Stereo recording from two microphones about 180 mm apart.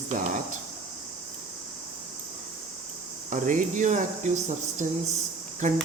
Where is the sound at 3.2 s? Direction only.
45° right (ahead or behind).